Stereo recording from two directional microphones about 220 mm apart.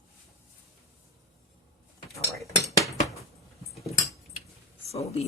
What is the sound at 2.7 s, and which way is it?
Cutlery, 15° left (ahead or behind).